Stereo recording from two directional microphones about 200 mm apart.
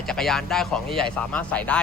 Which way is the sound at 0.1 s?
Centre (ahead or behind).